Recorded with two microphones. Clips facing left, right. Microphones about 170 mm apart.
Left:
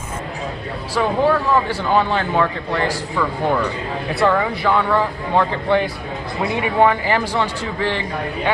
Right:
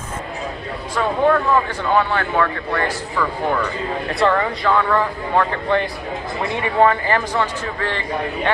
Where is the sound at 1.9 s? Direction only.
15° left (ahead or behind).